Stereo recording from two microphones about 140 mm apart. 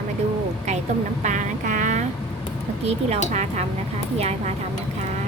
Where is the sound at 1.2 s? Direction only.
65° right (ahead or behind).